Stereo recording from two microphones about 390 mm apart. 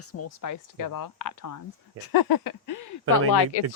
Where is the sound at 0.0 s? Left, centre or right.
Left.